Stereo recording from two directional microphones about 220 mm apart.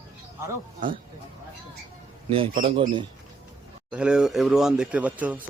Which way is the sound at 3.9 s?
5° right (ahead or behind).